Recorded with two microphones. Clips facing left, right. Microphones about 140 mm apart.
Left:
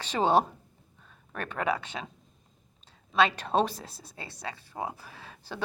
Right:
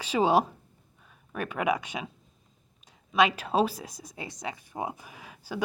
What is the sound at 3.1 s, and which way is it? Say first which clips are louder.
Speech: right 1 dB; 10° right (ahead or behind).